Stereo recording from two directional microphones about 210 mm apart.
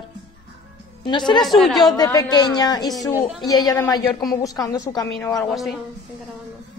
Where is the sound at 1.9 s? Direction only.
15° left (ahead or behind).